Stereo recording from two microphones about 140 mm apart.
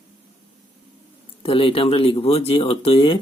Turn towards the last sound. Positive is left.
turn(degrees=40)  # may be behind; listen again after turning